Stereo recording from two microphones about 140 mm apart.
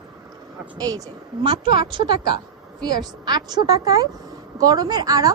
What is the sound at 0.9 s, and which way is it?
Speech, 25° right (ahead or behind).